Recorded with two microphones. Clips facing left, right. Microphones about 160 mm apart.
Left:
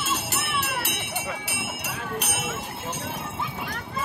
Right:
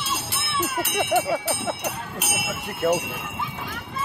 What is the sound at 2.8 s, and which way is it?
Speech, 65° right (ahead or behind).